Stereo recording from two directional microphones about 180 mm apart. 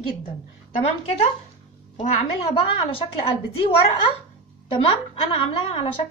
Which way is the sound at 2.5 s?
30° left (ahead or behind).